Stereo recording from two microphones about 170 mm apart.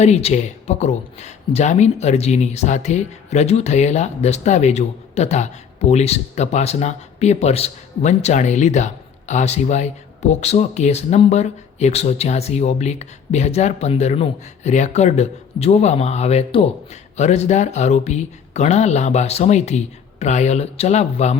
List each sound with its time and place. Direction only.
0.0 s speech: 40° left (ahead or behind)